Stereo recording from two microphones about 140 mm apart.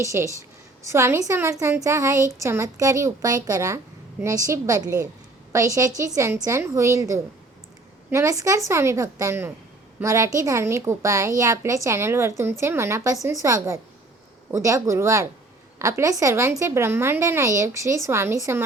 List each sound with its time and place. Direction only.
0.0 s a woman's voice: 20° right (ahead or behind)